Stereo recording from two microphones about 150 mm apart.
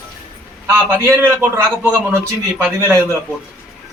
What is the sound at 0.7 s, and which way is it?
A man's voice, 15° right (ahead or behind).